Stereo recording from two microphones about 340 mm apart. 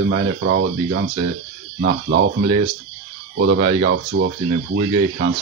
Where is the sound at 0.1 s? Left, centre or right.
Right.